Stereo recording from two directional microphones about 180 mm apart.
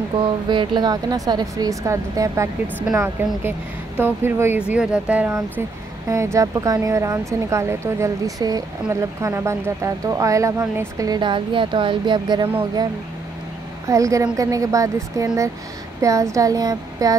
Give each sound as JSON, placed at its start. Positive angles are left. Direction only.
{"t": 0.2, "sound": "speech", "side_deg": -25}
{"t": 13.8, "sound": "speech", "side_deg": -20}